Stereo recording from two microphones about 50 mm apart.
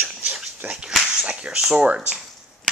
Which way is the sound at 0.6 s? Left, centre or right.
Right.